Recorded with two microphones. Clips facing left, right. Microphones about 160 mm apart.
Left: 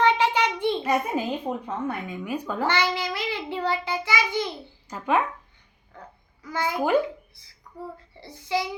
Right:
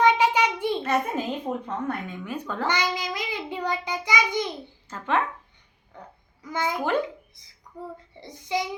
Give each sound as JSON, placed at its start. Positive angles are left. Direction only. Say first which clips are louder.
{"t": 0.0, "sound": "a sound", "louder": "right 1 dB", "side_deg": -10}
{"t": 0.8, "sound": "speech", "louder": "left 1 dB", "side_deg": 10}
{"t": 2.6, "sound": "child singing", "louder": "left 1 dB", "side_deg": -15}
{"t": 4.9, "sound": "speech", "louder": "left 2 dB", "side_deg": 10}
{"t": 5.9, "sound": "babbling", "louder": "even", "side_deg": -20}
{"t": 6.4, "sound": "a child's voice", "louder": "even", "side_deg": -20}
{"t": 8.1, "sound": "a child's voice", "louder": "left 1 dB", "side_deg": -20}